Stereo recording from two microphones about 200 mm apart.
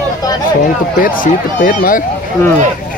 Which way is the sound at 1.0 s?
45° left (ahead or behind).